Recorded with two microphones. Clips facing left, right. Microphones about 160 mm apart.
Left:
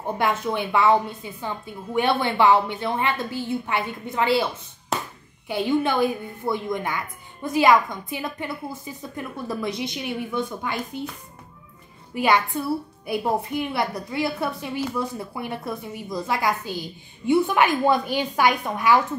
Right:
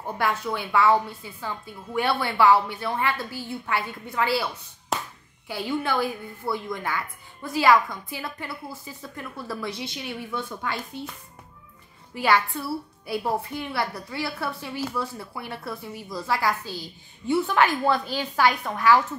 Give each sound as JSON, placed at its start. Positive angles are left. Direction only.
{"t": 0.0, "sound": "a woman's voice", "side_deg": 20}
{"t": 5.5, "sound": "a woman's voice", "side_deg": 20}
{"t": 12.1, "sound": "a woman's voice", "side_deg": 20}